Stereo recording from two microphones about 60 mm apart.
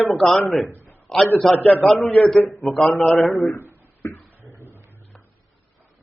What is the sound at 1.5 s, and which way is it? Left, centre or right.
Speech, left.